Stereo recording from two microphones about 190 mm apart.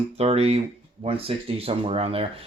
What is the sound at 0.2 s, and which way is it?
Speech, 35° right (ahead or behind).